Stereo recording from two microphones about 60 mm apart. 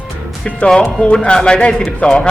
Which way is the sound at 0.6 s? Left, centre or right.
Centre.